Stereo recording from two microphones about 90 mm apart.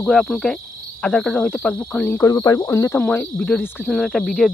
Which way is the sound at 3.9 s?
Centre (ahead or behind).